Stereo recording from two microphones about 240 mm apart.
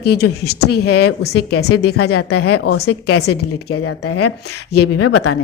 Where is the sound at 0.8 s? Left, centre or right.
Left.